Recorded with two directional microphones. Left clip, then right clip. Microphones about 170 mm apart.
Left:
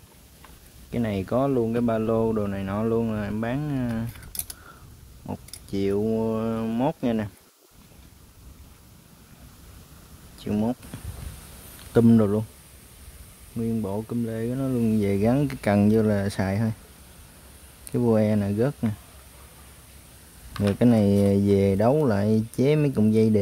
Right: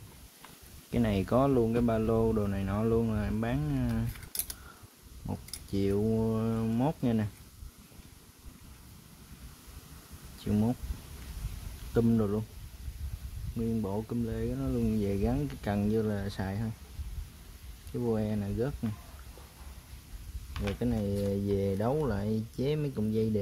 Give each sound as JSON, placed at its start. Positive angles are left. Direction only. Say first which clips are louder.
{"t": 0.9, "sound": "speech", "louder": "left 3 dB", "side_deg": 5}
{"t": 5.2, "sound": "speech", "louder": "left 5 dB", "side_deg": 35}
{"t": 10.4, "sound": "speech", "louder": "left 5 dB", "side_deg": 35}
{"t": 11.9, "sound": "speech", "louder": "left 9 dB", "side_deg": 25}
{"t": 13.7, "sound": "speech", "louder": "left 5 dB", "side_deg": 10}
{"t": 17.9, "sound": "speech", "louder": "left 10 dB", "side_deg": 25}
{"t": 20.6, "sound": "speech", "louder": "left 12 dB", "side_deg": 30}